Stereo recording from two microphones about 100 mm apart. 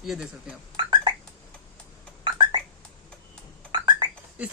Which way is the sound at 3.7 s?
55° right (ahead or behind).